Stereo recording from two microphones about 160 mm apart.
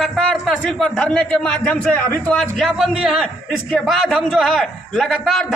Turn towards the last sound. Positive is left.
turn(degrees=0)  # may be behind; listen again after turning